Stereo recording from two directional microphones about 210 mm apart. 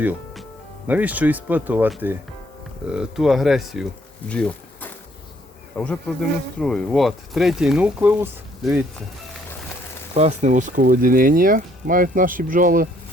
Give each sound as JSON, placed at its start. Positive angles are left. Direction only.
{"t": 0.0, "sound": "music", "side_deg": -10}
{"t": 0.9, "sound": "speech", "side_deg": -5}
{"t": 4.3, "sound": "a sound", "side_deg": 5}
{"t": 5.7, "sound": "speech", "side_deg": 5}
{"t": 10.2, "sound": "speech", "side_deg": -35}